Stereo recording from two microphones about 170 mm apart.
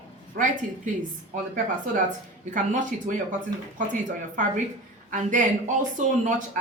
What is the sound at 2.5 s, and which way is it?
A woman's voice, 50° right (ahead or behind).